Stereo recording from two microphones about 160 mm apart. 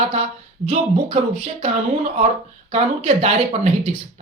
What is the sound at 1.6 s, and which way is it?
A woman's voice, 45° right (ahead or behind).